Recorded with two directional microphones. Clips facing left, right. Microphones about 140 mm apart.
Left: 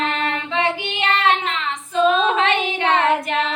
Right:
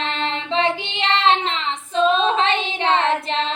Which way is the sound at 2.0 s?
30° right (ahead or behind).